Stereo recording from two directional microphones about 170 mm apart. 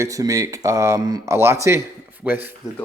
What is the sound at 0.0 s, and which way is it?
Speech, 20° right (ahead or behind).